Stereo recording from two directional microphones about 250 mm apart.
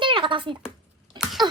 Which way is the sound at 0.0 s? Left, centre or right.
Centre.